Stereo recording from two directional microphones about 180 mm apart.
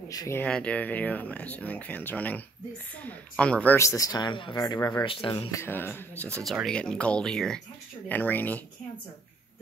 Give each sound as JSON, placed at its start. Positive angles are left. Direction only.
{"t": 0.1, "sound": "speech", "side_deg": 15}
{"t": 5.0, "sound": "speech", "side_deg": 30}
{"t": 5.5, "sound": "speech", "side_deg": 10}